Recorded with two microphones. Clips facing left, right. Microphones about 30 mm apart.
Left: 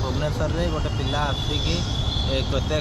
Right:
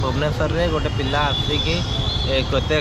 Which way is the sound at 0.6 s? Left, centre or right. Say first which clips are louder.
Right 5 dB; right.